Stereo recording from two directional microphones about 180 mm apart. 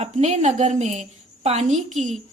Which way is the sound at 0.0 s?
40° right (ahead or behind).